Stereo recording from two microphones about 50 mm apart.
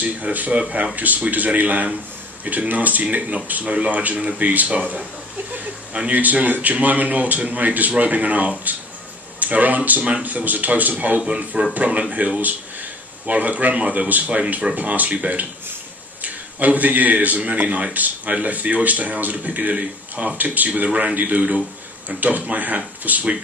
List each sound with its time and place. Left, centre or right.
0.0 s speech: right
5.9 s speech: right
11.1 s speech: right
13.3 s a man's voice: right